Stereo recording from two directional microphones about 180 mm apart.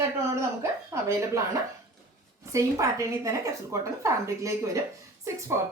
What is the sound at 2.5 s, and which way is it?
A woman's voice, 15° right (ahead or behind).